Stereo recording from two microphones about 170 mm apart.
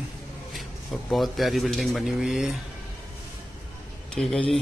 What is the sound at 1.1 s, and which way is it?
Speech, centre (ahead or behind).